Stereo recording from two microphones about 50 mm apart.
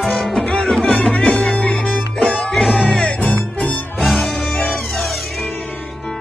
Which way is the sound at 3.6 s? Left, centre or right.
Left.